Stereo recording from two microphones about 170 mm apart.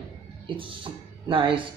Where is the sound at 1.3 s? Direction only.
30° right (ahead or behind).